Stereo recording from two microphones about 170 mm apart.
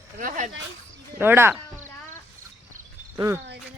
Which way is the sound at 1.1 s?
15° right (ahead or behind).